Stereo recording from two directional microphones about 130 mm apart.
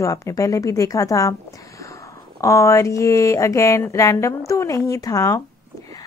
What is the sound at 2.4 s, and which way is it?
Speech, 25° left (ahead or behind).